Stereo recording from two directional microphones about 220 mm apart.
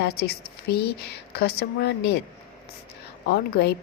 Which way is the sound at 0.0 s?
45° left (ahead or behind).